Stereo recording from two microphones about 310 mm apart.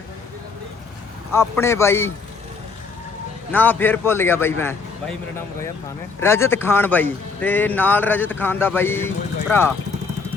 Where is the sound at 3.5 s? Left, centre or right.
Centre.